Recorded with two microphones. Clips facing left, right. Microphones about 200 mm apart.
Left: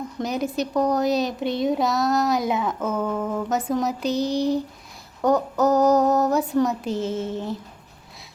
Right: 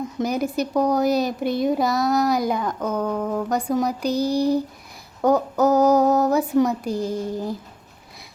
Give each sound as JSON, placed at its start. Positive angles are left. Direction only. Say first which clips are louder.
{"t": 0.2, "sound": "speech", "louder": "right 2 dB", "side_deg": 0}
{"t": 3.1, "sound": "speech", "louder": "right 1 dB", "side_deg": -10}
{"t": 3.5, "sound": "speech", "louder": "right 1 dB", "side_deg": 5}
{"t": 4.1, "sound": "a sound", "louder": "right 2 dB", "side_deg": 20}
{"t": 5.2, "sound": "speech", "louder": "right 1 dB", "side_deg": 0}
{"t": 6.9, "sound": "a sound", "louder": "right 1 dB", "side_deg": 25}